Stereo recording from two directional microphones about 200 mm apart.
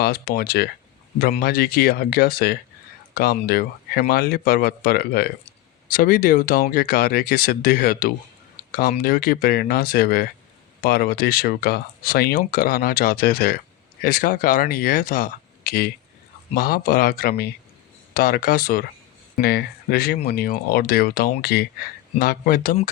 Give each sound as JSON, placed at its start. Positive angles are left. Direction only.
{"t": 0.0, "sound": "speech", "side_deg": 50}